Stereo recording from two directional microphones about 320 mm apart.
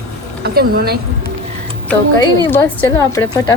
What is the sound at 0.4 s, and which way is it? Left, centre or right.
Speech, right.